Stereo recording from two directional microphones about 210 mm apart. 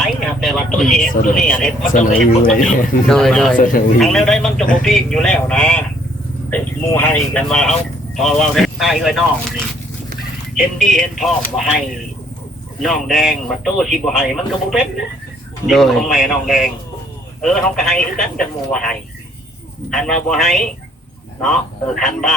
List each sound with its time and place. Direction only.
0.0 s a sound: centre (ahead or behind)
1.3 s speech: 5° left (ahead or behind)
1.8 s speech: 40° left (ahead or behind)
3.1 s speech: 5° left (ahead or behind)
3.6 s speech: 40° left (ahead or behind)
3.9 s speech: centre (ahead or behind)
10.8 s speech: centre (ahead or behind)
12.8 s speech: centre (ahead or behind)
21.9 s speech: centre (ahead or behind)